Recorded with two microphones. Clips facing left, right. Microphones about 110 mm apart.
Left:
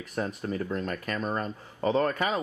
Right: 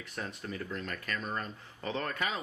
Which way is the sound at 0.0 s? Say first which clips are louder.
Left 8 dB; 40° left (ahead or behind).